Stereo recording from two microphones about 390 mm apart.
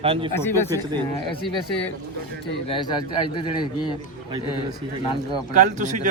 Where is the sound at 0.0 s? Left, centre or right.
Centre.